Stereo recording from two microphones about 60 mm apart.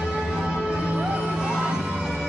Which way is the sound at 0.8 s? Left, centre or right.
Centre.